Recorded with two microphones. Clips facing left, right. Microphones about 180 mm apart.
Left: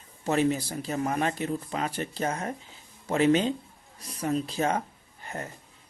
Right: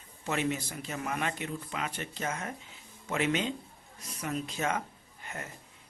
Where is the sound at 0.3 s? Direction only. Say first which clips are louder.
Left 7 dB; 35° left (ahead or behind).